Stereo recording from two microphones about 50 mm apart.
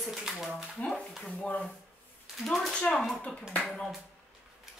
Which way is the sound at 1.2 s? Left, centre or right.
Left.